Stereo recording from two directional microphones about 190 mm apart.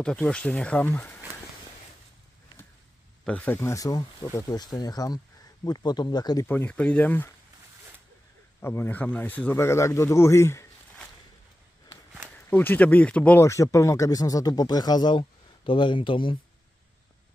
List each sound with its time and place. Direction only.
0.0 s speech: 5° left (ahead or behind)
3.3 s speech: 10° left (ahead or behind)
6.4 s speech: 10° left (ahead or behind)
8.5 s speech: 10° left (ahead or behind)
12.4 s speech: 10° left (ahead or behind); by 16.3 s 25° left (ahead or behind)